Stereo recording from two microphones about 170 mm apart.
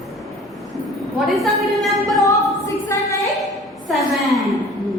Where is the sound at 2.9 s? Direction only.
15° left (ahead or behind).